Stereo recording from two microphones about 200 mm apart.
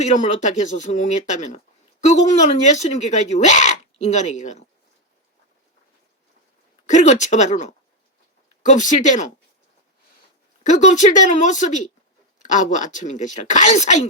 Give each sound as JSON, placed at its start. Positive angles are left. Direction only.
{"t": 0.0, "sound": "speech", "side_deg": 35}
{"t": 6.8, "sound": "speech", "side_deg": 35}
{"t": 10.6, "sound": "speech", "side_deg": 35}